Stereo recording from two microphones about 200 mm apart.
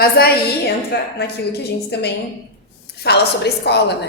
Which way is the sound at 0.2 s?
50° left (ahead or behind).